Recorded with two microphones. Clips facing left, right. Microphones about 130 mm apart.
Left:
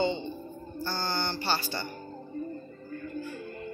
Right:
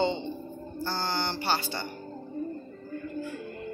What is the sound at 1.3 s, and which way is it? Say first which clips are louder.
Speech: right 1 dB; 20° right (ahead or behind).